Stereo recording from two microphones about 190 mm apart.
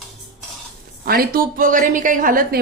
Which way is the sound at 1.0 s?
50° right (ahead or behind).